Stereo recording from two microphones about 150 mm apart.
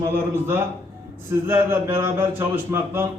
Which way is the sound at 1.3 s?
15° right (ahead or behind).